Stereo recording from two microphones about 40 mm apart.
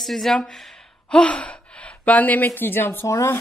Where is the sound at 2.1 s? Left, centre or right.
Left.